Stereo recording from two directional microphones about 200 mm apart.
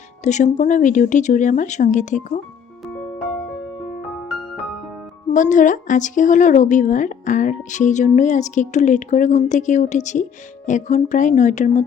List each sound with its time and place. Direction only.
0.3 s speech: 35° left (ahead or behind)
5.3 s speech: 40° left (ahead or behind)